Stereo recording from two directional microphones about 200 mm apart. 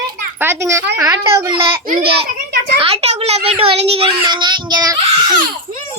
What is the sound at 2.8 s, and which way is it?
A child's voice, 30° right (ahead or behind).